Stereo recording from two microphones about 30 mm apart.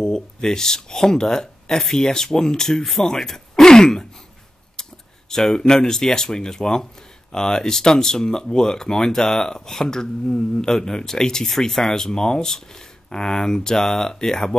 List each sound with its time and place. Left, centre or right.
0.0 s speech: left
2.8 s speech: centre
3.3 s a sound: centre
4.8 s keys jangling: left
5.3 s speech: left
11.4 s speech: centre